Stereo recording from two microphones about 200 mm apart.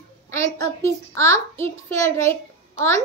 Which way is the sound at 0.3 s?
15° left (ahead or behind).